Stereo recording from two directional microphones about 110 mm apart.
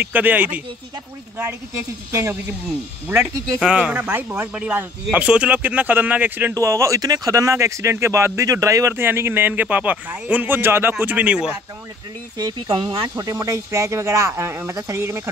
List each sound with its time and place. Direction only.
0.0 s speech: 15° right (ahead or behind)
3.1 s speech: 30° right (ahead or behind)
3.6 s speech: 10° right (ahead or behind)
6.5 s speech: 25° right (ahead or behind); by 11.5 s 10° right (ahead or behind)
12.4 s speech: 35° right (ahead or behind)
13.2 s speech: 30° right (ahead or behind)